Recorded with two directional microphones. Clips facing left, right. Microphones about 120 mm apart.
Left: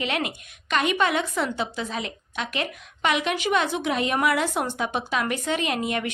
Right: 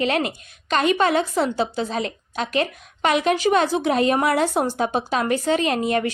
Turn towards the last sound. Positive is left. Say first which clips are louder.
# right 5 dB
turn(degrees=-35)  # may be behind; listen again after turning